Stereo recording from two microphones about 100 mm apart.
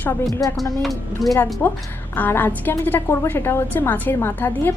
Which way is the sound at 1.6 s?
30° left (ahead or behind).